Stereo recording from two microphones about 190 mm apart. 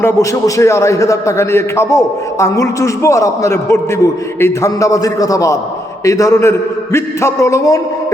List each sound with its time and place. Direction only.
0.0 s a man's voice: 15° left (ahead or behind)